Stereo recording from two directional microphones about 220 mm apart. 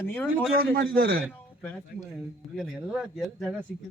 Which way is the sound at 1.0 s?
45° right (ahead or behind).